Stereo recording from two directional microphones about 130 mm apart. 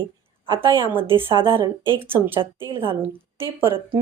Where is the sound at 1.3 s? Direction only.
40° right (ahead or behind).